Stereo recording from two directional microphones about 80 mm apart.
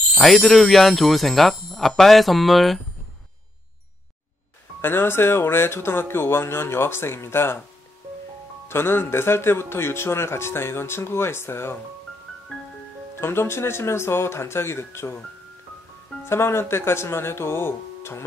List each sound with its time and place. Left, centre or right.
0.2 s speech: centre
4.8 s speech: left
8.6 s speech: left
13.2 s speech: left
16.3 s speech: left